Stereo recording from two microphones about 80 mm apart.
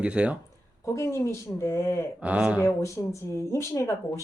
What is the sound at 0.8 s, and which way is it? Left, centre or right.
Speech, left.